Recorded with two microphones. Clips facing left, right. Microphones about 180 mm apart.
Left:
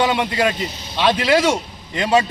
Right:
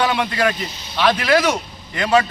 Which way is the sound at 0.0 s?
20° left (ahead or behind).